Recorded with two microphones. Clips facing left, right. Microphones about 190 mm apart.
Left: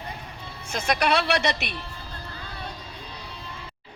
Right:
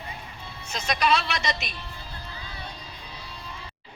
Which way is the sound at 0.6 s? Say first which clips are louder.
Left 1 dB; 55° left (ahead or behind).